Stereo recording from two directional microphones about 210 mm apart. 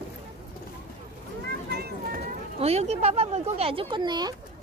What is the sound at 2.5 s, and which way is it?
Speech, 30° right (ahead or behind).